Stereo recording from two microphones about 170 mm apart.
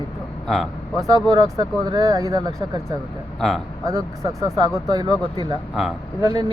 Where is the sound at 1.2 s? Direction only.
20° right (ahead or behind).